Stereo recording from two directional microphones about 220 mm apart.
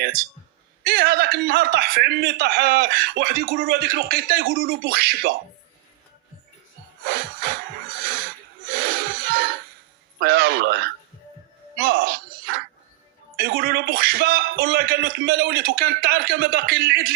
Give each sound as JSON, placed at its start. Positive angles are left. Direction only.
{"t": 0.9, "sound": "a man's voice", "side_deg": -45}
{"t": 8.0, "sound": "music", "side_deg": -45}
{"t": 10.2, "sound": "a man's voice", "side_deg": -45}
{"t": 11.8, "sound": "music", "side_deg": -40}
{"t": 13.4, "sound": "a man's voice", "side_deg": -40}